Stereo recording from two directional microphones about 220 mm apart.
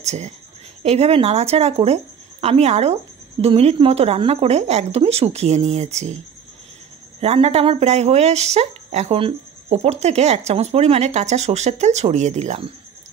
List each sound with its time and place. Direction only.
0.0 s a woman's voice: 30° right (ahead or behind)
7.2 s speech: 25° right (ahead or behind)